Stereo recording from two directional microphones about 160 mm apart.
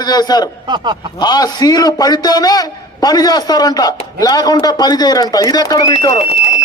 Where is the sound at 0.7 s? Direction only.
30° right (ahead or behind).